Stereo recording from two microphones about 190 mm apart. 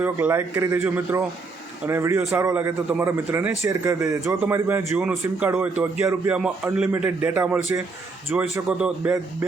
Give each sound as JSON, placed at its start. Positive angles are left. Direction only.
{"t": 0.0, "sound": "a man's voice", "side_deg": -10}